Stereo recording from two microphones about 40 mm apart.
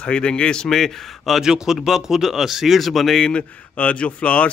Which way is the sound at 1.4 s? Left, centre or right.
Centre.